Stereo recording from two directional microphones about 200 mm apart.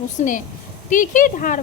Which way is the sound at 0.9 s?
40° left (ahead or behind).